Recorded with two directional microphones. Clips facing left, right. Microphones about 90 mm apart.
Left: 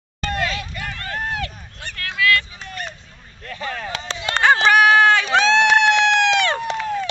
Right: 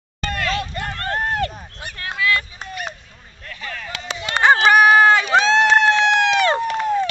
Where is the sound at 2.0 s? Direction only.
25° right (ahead or behind).